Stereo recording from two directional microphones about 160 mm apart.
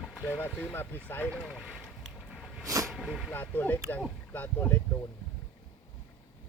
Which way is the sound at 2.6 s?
20° right (ahead or behind).